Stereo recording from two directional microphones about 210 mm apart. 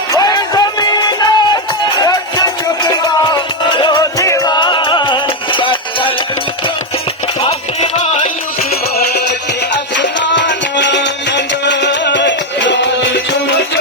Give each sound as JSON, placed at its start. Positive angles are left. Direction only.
{"t": 0.1, "sound": "music", "side_deg": 20}
{"t": 7.4, "sound": "music", "side_deg": 25}
{"t": 9.0, "sound": "music", "side_deg": 50}